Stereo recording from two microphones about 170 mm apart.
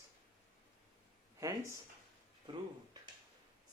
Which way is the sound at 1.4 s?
20° right (ahead or behind).